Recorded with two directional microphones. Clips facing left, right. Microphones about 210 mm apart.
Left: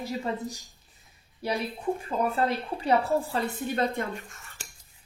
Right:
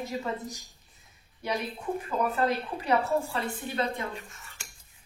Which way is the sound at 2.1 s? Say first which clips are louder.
Right 1 dB; 30° left (ahead or behind).